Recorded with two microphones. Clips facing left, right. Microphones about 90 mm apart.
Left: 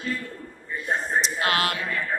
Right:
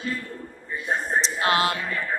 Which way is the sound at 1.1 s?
30° right (ahead or behind).